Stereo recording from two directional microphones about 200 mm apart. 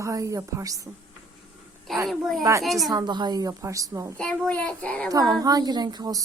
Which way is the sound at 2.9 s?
20° right (ahead or behind).